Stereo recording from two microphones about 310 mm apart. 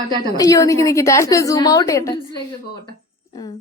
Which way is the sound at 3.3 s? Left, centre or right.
Centre.